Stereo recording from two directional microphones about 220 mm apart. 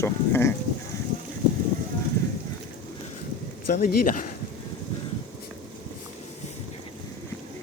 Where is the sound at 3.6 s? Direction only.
40° left (ahead or behind).